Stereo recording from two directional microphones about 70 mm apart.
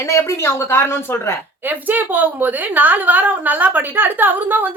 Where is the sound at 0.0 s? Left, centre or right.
Left.